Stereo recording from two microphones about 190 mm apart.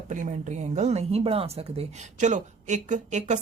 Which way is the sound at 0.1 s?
40° right (ahead or behind).